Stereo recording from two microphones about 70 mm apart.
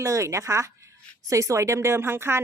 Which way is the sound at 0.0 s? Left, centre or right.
Right.